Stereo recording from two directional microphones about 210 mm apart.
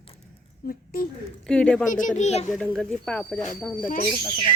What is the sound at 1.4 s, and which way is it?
Speech, 5° left (ahead or behind).